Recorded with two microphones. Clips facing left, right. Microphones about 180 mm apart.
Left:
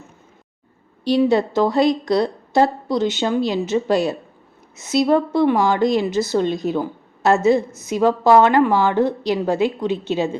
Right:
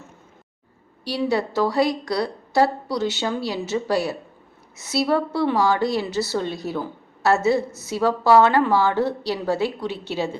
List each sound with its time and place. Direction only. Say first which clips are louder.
1.0 s a woman's voice: left 7 dB; 20° left (ahead or behind)